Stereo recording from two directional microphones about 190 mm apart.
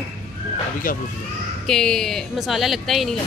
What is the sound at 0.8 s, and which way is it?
Speech, 45° left (ahead or behind).